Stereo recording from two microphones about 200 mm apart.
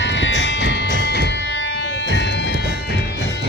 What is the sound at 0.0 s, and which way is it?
Music, 65° left (ahead or behind).